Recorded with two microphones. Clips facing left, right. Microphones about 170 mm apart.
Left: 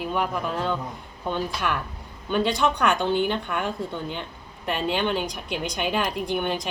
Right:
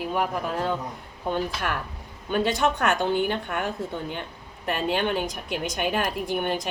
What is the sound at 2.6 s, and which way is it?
Speech, 45° right (ahead or behind).